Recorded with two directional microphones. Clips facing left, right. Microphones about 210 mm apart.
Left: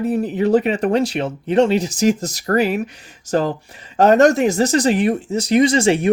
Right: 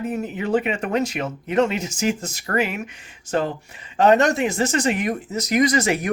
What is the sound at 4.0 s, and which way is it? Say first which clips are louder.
Speech: left 4 dB; 45° left (ahead or behind).